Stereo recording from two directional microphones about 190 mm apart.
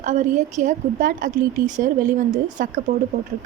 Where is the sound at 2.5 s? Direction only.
45° right (ahead or behind).